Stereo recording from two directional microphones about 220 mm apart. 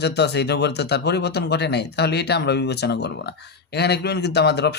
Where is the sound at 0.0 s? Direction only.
50° left (ahead or behind).